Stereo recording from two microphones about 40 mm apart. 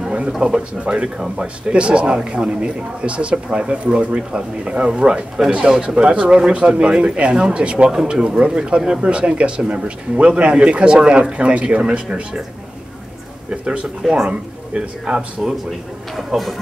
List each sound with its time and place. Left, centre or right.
0.4 s a man's voice: right
13.5 s a man's voice: right
16.3 s speech: centre